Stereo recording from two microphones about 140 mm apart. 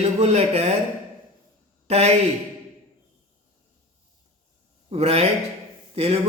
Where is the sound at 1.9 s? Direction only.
50° right (ahead or behind).